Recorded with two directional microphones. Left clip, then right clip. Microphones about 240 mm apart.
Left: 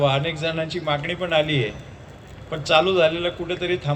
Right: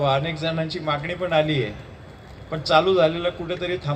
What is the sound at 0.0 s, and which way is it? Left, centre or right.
A man's voice, left.